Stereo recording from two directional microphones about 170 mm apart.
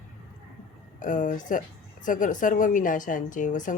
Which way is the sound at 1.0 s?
50° left (ahead or behind).